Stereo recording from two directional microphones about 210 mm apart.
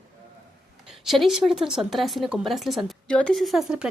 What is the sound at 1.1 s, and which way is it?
A woman's voice, centre (ahead or behind).